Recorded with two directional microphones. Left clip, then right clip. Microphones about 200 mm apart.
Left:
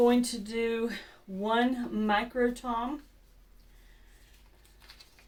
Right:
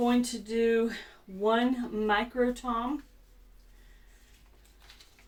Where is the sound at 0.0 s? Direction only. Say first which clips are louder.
Left 3 dB; 25° left (ahead or behind).